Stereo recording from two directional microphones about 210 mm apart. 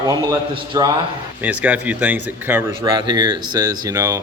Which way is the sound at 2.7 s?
20° right (ahead or behind).